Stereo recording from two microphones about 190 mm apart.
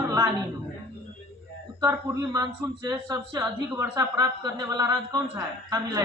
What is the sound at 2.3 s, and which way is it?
A woman's voice, 15° right (ahead or behind).